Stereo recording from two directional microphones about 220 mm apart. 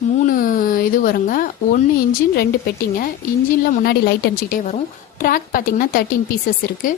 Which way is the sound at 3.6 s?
40° left (ahead or behind).